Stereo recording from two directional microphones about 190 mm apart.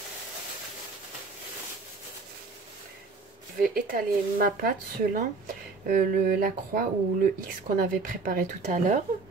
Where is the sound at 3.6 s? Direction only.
50° right (ahead or behind).